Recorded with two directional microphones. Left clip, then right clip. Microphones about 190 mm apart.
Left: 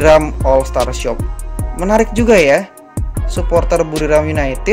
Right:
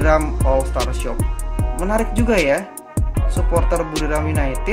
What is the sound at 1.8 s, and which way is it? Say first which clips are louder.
Speech: left 8 dB; 35° left (ahead or behind).